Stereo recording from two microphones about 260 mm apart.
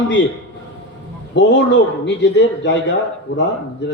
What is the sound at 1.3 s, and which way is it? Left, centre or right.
A man's voice, left.